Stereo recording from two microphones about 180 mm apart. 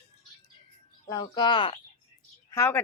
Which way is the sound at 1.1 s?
25° left (ahead or behind).